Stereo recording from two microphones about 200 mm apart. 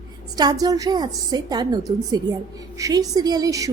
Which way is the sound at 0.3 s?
20° right (ahead or behind).